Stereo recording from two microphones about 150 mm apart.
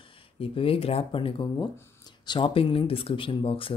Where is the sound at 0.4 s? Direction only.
40° left (ahead or behind).